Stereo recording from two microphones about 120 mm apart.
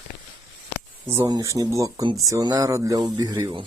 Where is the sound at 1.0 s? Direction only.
20° right (ahead or behind).